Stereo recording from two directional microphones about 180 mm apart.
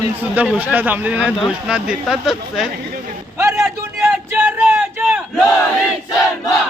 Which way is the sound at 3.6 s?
5° right (ahead or behind).